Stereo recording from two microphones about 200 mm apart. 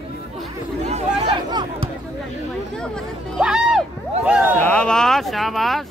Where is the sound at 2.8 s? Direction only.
Centre (ahead or behind).